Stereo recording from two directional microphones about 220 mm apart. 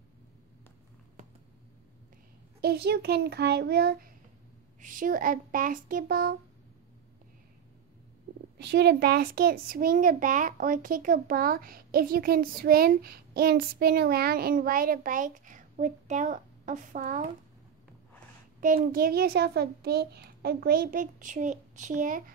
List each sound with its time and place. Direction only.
2.6 s a child's voice: 45° right (ahead or behind)
8.5 s a child's voice: 50° right (ahead or behind)
18.9 s a child's voice: 40° right (ahead or behind)